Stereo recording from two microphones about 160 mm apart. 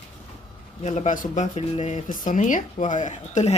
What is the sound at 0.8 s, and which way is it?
Speech, 45° left (ahead or behind).